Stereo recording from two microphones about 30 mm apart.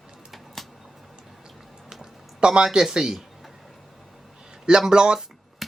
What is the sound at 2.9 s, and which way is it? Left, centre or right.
Speech, centre.